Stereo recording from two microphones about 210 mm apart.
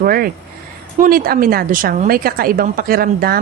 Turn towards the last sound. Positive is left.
turn(degrees=-45)  # may be behind; listen again after turning